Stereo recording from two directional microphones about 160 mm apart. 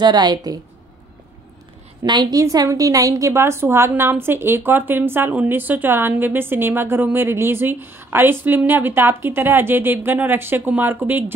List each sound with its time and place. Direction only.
0.0 s a woman's voice: 25° right (ahead or behind)
2.0 s a woman's voice: 25° right (ahead or behind)